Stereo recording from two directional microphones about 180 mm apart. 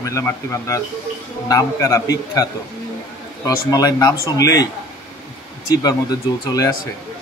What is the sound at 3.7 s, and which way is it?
Speech, 20° left (ahead or behind).